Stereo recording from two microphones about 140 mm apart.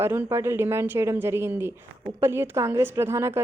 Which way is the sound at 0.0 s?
15° right (ahead or behind).